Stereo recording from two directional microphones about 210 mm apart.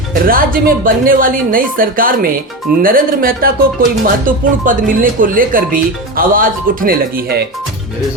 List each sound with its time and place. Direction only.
0.3 s speech: 40° right (ahead or behind)